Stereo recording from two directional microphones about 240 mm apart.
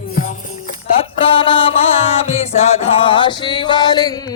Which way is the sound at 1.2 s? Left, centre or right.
Left.